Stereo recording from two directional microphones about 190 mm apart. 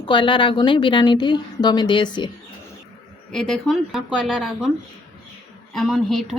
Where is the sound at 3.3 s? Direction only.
Centre (ahead or behind).